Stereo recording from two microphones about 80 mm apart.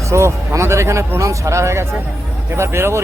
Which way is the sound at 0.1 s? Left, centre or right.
Right.